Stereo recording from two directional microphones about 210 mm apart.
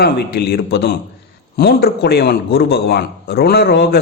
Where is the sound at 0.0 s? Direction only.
50° left (ahead or behind).